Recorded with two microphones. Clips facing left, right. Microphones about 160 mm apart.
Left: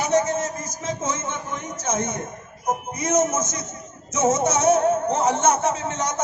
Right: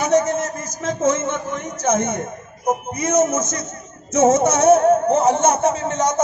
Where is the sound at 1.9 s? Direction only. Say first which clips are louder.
Right 6 dB; 60° right (ahead or behind).